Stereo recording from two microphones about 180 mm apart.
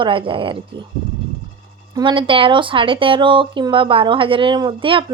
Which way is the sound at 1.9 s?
25° right (ahead or behind).